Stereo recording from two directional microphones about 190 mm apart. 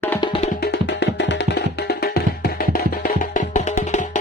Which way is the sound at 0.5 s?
60° left (ahead or behind).